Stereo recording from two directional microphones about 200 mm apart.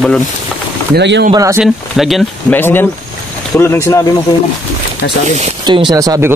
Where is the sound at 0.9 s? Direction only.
60° right (ahead or behind).